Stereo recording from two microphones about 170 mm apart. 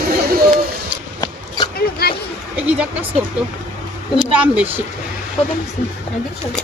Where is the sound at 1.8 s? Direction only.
65° left (ahead or behind).